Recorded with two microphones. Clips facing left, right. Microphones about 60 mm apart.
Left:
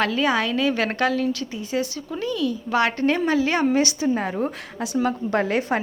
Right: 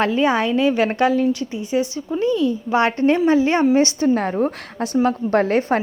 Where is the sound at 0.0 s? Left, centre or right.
Right.